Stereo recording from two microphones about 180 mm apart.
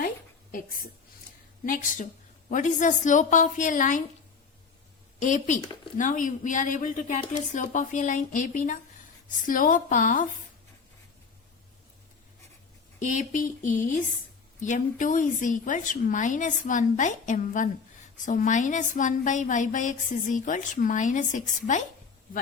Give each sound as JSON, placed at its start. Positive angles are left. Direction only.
{"t": 2.5, "sound": "a woman's voice", "side_deg": 45}
{"t": 5.2, "sound": "a woman's voice", "side_deg": 45}
{"t": 13.0, "sound": "a woman's voice", "side_deg": 45}